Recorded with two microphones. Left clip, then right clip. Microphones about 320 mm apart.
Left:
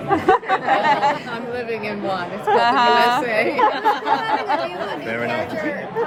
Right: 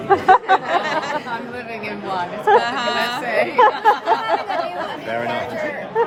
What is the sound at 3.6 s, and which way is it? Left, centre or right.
Speech, right.